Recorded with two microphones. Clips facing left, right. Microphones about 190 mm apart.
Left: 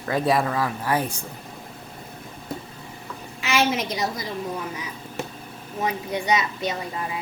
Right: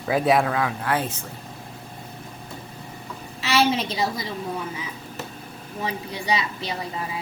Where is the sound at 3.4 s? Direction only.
30° right (ahead or behind).